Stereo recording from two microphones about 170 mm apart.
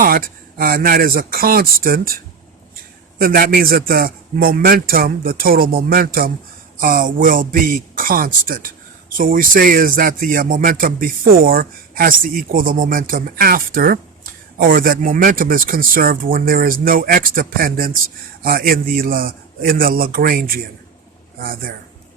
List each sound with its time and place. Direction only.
0.0 s a man's voice: 60° right (ahead or behind)